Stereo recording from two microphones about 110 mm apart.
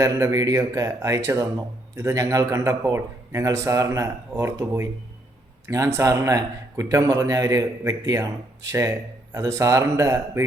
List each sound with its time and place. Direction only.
0.0 s a man's voice: 30° right (ahead or behind)